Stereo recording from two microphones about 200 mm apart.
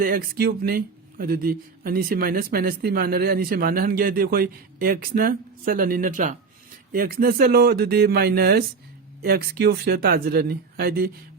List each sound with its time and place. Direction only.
0.0 s speech: 45° right (ahead or behind)